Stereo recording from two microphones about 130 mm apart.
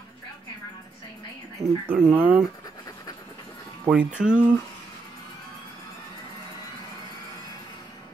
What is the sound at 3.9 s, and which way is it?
Speech, 10° right (ahead or behind).